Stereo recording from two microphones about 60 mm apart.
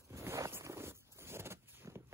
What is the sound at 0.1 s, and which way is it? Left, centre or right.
Zipper, right.